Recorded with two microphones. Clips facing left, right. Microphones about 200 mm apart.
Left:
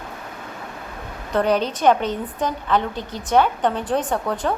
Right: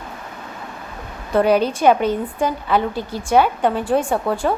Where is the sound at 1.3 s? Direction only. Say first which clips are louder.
Right 4 dB; 10° right (ahead or behind).